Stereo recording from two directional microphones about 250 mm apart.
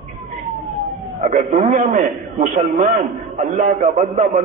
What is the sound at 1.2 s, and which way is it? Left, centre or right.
A man's voice, right.